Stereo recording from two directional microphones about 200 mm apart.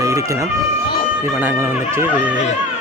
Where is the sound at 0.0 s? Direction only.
15° right (ahead or behind).